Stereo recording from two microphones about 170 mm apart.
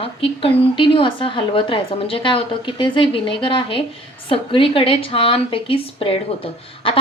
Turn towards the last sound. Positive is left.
turn(degrees=35)  # may be behind; listen again after turning